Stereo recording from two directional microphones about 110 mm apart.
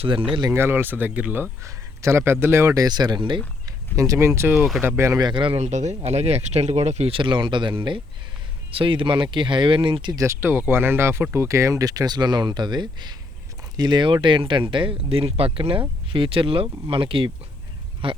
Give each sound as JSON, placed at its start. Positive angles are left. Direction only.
{"t": 0.5, "sound": "speech", "side_deg": -20}
{"t": 2.8, "sound": "speech", "side_deg": -40}
{"t": 3.7, "sound": "a sound", "side_deg": -30}
{"t": 4.5, "sound": "speech", "side_deg": -5}
{"t": 4.8, "sound": "speech", "side_deg": -20}
{"t": 5.2, "sound": "speech", "side_deg": -45}
{"t": 5.5, "sound": "speech", "side_deg": -90}
{"t": 6.0, "sound": "speech", "side_deg": -75}
{"t": 7.1, "sound": "speech", "side_deg": -50}
{"t": 10.2, "sound": "speech", "side_deg": -20}